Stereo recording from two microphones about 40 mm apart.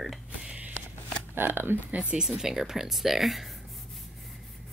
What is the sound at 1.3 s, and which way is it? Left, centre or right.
Speech, right.